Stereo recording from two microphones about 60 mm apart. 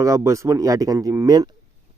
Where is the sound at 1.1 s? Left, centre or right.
Right.